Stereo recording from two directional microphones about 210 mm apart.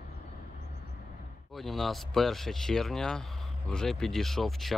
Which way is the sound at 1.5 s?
Centre (ahead or behind).